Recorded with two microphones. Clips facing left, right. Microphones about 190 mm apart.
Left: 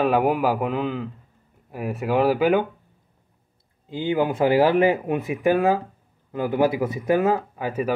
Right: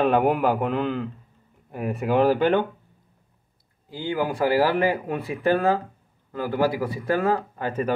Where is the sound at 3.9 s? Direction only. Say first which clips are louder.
Left 4 dB; 20° left (ahead or behind).